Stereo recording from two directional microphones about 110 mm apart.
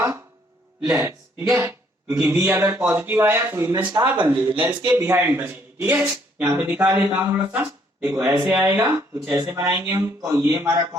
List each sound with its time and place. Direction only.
0.9 s a man's voice: 20° right (ahead or behind)